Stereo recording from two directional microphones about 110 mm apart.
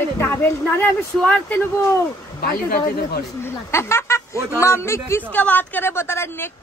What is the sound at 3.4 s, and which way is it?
Speech, 25° left (ahead or behind).